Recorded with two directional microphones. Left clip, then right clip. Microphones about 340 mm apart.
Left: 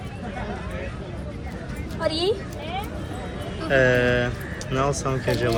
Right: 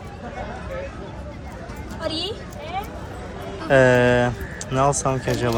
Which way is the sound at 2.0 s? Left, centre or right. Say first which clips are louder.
Left 3 dB; centre.